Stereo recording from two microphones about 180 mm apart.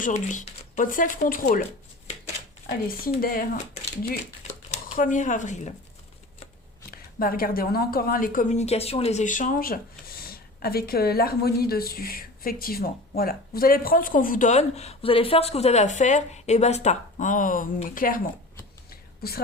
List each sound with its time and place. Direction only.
0.0 s a woman's voice: 45° left (ahead or behind)
3.2 s a woman's voice: 55° left (ahead or behind)
4.7 s speech: 45° left (ahead or behind)
6.9 s a woman's voice: 55° left (ahead or behind)
18.9 s a sound: 60° left (ahead or behind)